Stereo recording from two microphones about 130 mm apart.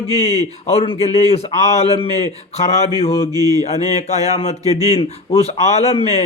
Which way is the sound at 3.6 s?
60° left (ahead or behind).